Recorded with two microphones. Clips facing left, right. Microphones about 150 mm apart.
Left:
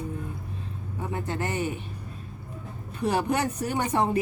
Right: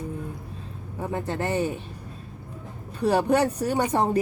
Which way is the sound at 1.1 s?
35° right (ahead or behind).